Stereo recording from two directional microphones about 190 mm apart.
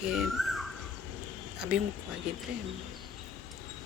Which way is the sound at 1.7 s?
5° right (ahead or behind).